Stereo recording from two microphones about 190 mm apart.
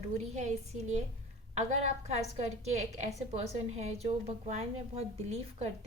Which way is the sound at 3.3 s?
35° right (ahead or behind).